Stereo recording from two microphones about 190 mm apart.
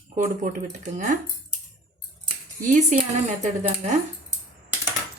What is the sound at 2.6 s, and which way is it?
Speech, 40° right (ahead or behind).